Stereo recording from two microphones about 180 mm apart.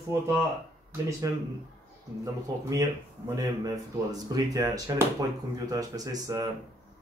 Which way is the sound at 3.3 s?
20° right (ahead or behind).